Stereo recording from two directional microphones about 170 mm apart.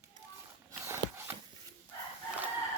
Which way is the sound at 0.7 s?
15° right (ahead or behind).